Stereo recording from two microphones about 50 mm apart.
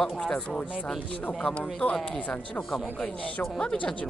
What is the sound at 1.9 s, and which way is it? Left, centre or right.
Speech, centre.